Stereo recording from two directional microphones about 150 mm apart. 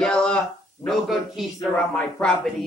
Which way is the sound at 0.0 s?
5° left (ahead or behind).